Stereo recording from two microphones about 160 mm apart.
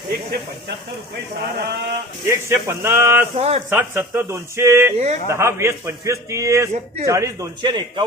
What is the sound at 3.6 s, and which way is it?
A man's voice, 15° right (ahead or behind).